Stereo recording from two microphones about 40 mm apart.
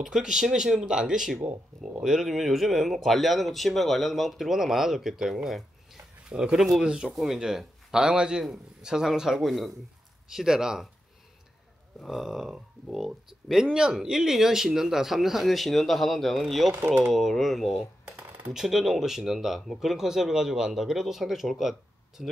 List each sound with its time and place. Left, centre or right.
0.1 s speech: centre
9.4 s speech: centre
10.3 s speech: centre
12.0 s speech: centre
13.7 s speech: right; by 22.2 s centre